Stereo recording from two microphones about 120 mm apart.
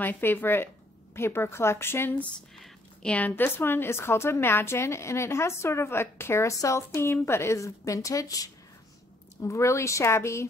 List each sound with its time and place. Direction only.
0.0 s a woman's voice: 15° left (ahead or behind)
2.6 s a woman's voice: 10° left (ahead or behind); by 10.5 s 25° left (ahead or behind)